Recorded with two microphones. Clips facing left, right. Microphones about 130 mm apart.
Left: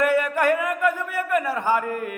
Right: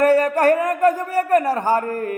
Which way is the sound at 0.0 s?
40° right (ahead or behind).